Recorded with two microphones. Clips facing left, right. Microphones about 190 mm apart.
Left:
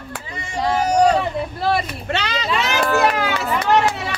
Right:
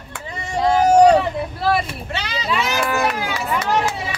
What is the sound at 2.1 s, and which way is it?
Speech, 70° left (ahead or behind).